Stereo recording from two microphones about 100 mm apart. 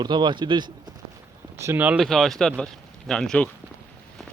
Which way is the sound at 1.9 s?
Centre (ahead or behind).